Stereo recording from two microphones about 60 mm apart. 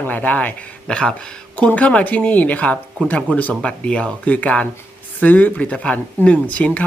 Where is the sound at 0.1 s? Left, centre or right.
Left.